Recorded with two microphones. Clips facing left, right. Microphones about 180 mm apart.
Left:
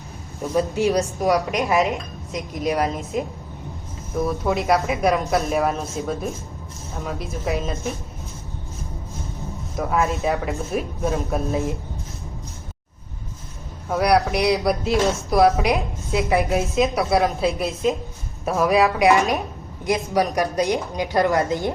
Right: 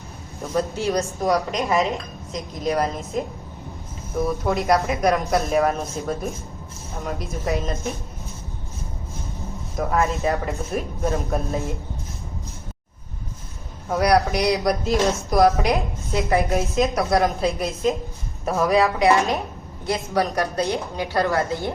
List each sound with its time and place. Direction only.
0.5 s a woman's voice: 15° left (ahead or behind)
1.5 s a woman's voice: 5° left (ahead or behind)
9.7 s a woman's voice: centre (ahead or behind)
13.9 s a woman's voice: centre (ahead or behind)
19.8 s a woman's voice: 15° left (ahead or behind)